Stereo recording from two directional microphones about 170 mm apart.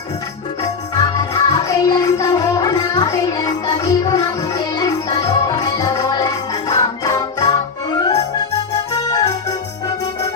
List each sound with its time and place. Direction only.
0.9 s music: 20° left (ahead or behind)
9.0 s organ: 20° left (ahead or behind)